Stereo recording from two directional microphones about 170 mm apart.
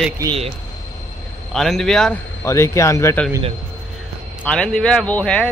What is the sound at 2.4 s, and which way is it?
Speech, 15° left (ahead or behind).